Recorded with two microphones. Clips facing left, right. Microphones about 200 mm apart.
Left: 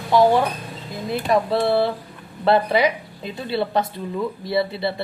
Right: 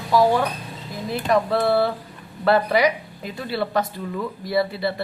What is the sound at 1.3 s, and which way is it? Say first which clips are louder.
A woman's voice: even; 25° left (ahead or behind).